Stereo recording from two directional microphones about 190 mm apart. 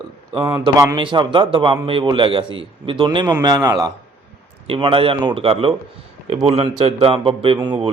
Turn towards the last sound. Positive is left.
turn(degrees=-25)  # may be behind; listen again after turning